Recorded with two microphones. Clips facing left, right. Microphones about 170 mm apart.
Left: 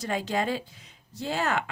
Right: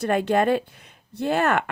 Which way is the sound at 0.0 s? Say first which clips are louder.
Right 8 dB; 60° right (ahead or behind).